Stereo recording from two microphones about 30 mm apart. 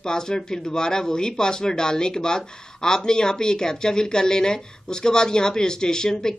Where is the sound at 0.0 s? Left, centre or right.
Left.